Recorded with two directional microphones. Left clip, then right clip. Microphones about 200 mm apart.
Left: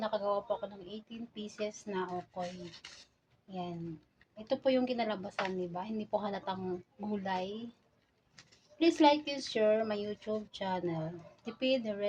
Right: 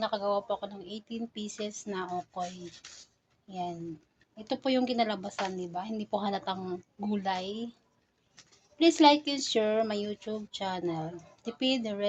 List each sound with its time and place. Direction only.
0.0 s speech: 45° right (ahead or behind)
3.5 s speech: 45° right (ahead or behind)
8.8 s speech: 45° right (ahead or behind)